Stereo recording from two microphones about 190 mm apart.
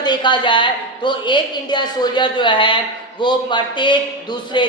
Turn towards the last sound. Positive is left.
turn(degrees=25)  # may be behind; listen again after turning